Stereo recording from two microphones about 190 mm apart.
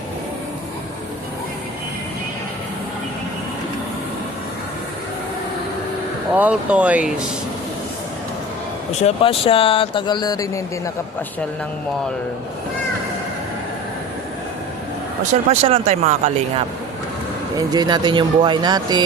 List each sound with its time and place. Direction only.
6.3 s speech: 5° right (ahead or behind)
9.0 s speech: 30° left (ahead or behind)
15.6 s speech: 30° right (ahead or behind)
17.6 s speech: 20° right (ahead or behind)